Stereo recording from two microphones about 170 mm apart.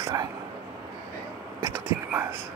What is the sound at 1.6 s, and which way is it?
Speech, 10° right (ahead or behind).